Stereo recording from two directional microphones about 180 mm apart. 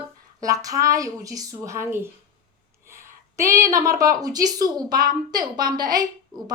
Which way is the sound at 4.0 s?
20° right (ahead or behind).